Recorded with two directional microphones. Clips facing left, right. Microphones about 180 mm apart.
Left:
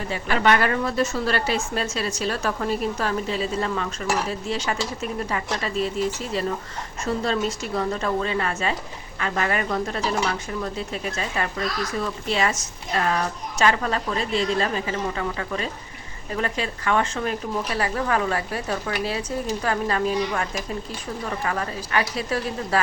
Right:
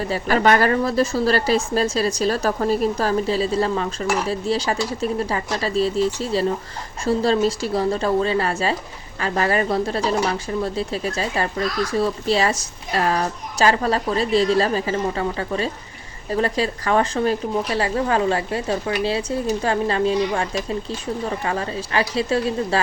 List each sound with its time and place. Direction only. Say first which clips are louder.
0.1 s a woman's voice: right 3 dB; 40° right (ahead or behind)